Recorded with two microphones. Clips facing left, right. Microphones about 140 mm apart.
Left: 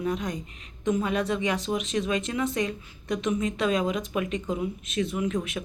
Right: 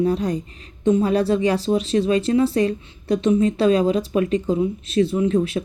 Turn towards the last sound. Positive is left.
turn(degrees=-30)  # may be behind; listen again after turning